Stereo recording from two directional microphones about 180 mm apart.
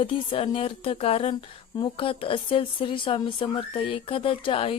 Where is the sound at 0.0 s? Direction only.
30° left (ahead or behind).